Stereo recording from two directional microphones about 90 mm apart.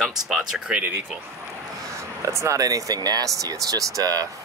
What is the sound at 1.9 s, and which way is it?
Speech, 35° right (ahead or behind).